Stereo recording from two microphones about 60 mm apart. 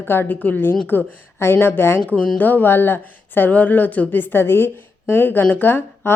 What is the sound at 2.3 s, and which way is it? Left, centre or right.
Speech, left.